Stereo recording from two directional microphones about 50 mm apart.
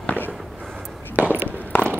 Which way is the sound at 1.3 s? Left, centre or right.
Right.